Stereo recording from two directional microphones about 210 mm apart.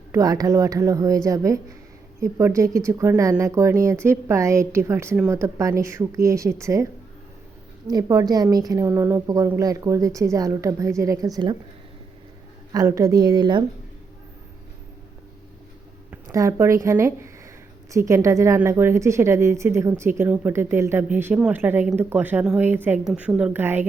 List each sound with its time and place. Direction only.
0.1 s a woman's voice: 15° right (ahead or behind)
7.9 s a woman's voice: 20° right (ahead or behind)
12.7 s a woman's voice: 15° right (ahead or behind)
16.0 s a woman's voice: 15° right (ahead or behind)